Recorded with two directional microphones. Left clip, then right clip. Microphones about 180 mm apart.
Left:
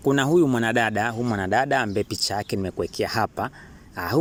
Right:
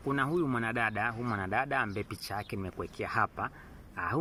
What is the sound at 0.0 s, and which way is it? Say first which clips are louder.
Speech: left 11 dB; 45° left (ahead or behind).